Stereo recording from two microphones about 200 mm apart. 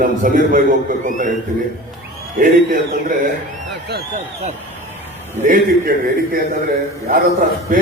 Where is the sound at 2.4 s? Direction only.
45° right (ahead or behind).